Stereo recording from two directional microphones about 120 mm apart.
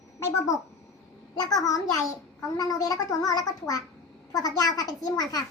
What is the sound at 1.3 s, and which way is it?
A child's voice, 35° left (ahead or behind).